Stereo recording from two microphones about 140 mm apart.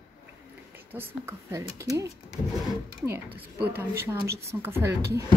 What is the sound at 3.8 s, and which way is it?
Speech, 15° right (ahead or behind).